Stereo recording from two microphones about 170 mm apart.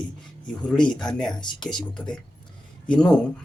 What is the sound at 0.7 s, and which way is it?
Speech, 25° left (ahead or behind).